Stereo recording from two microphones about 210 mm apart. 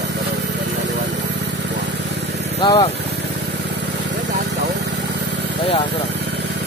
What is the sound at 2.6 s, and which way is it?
Speech, 25° left (ahead or behind).